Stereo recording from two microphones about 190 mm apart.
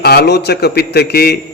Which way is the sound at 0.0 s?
55° left (ahead or behind).